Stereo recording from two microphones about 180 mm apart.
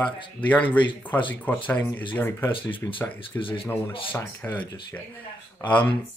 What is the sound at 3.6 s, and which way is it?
Speech, 10° left (ahead or behind).